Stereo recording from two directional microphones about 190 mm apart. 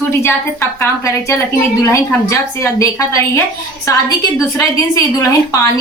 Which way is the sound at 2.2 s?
15° left (ahead or behind).